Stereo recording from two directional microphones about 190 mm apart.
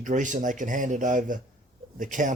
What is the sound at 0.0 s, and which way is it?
Speech, 40° right (ahead or behind).